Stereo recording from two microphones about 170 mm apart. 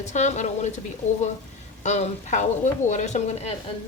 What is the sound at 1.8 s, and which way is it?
A woman's voice, 45° left (ahead or behind).